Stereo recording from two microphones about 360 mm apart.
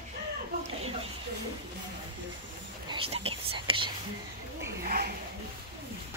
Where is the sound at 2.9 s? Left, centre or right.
Centre.